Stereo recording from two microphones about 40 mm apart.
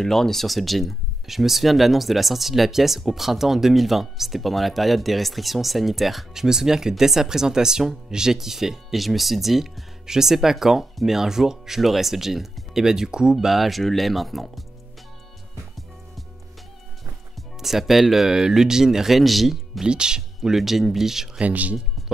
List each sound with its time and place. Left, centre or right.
0.0 s speech: centre
6.4 s speech: centre
13.5 s speech: centre
17.4 s speech: centre
19.8 s speech: centre
20.5 s speech: centre
21.4 s speech: right